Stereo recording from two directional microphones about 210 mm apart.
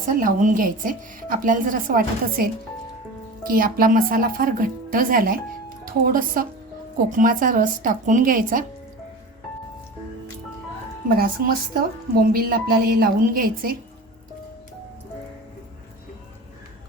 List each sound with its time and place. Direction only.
0.2 s a woman's voice: 40° right (ahead or behind)
11.1 s a woman's voice: 45° right (ahead or behind)